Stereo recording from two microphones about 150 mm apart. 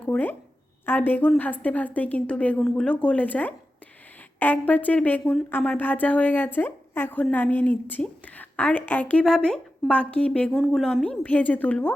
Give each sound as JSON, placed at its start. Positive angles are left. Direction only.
{"t": 0.0, "sound": "speech", "side_deg": 10}